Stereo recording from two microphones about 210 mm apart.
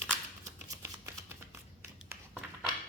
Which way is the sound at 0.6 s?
15° right (ahead or behind).